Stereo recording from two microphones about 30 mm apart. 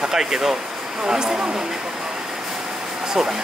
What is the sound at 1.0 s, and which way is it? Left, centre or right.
Speech, right.